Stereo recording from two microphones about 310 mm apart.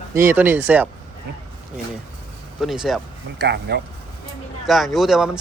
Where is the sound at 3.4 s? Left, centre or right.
Right.